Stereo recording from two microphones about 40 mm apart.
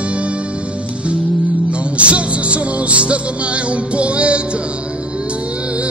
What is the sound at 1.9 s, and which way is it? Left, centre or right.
Music, right.